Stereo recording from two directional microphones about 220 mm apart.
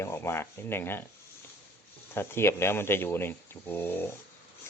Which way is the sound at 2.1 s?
10° left (ahead or behind).